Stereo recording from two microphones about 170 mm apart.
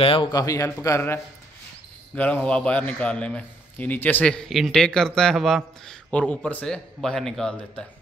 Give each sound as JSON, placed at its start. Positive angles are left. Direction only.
{"t": 0.0, "sound": "speech", "side_deg": 30}
{"t": 0.3, "sound": "a man's voice", "side_deg": 20}